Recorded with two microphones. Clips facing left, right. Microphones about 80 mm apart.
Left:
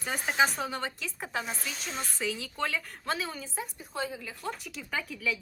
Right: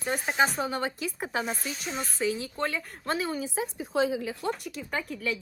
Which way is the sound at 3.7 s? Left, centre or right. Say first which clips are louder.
Right 11 dB; right.